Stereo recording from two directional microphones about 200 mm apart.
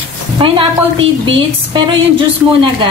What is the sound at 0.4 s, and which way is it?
A woman's voice, 25° right (ahead or behind).